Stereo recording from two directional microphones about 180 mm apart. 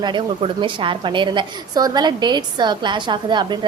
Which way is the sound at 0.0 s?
25° right (ahead or behind).